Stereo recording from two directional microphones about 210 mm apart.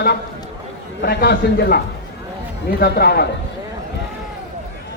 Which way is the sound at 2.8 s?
50° left (ahead or behind).